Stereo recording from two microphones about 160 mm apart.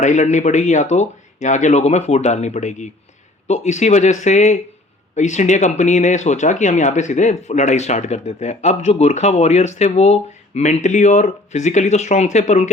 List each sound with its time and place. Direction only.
0.0 s speech: 50° left (ahead or behind)